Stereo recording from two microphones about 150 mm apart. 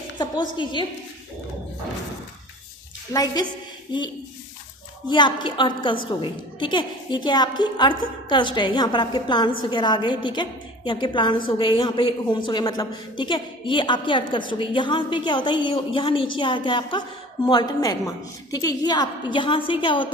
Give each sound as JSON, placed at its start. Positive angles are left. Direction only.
{"t": 0.2, "sound": "a woman's voice", "side_deg": 30}
{"t": 3.1, "sound": "a woman's voice", "side_deg": 25}
{"t": 5.0, "sound": "a woman's voice", "side_deg": 30}